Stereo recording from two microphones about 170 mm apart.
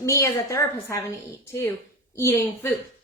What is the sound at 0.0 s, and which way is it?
A woman's voice, 20° left (ahead or behind).